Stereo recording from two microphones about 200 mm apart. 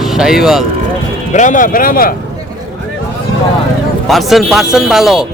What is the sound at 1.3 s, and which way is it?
Speech, 40° left (ahead or behind).